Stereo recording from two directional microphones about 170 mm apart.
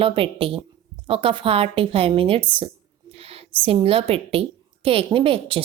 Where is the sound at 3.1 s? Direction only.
35° right (ahead or behind).